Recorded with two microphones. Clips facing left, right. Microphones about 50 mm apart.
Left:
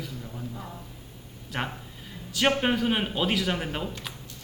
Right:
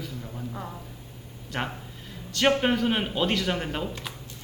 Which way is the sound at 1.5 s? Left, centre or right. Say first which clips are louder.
Right 1 dB; centre.